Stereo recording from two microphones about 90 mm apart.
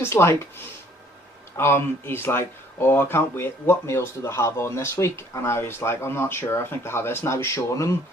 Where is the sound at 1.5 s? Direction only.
25° left (ahead or behind).